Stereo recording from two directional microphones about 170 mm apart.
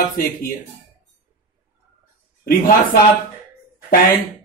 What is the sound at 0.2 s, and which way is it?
Speech, 55° left (ahead or behind).